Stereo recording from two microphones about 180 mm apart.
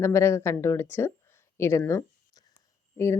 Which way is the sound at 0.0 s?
15° left (ahead or behind).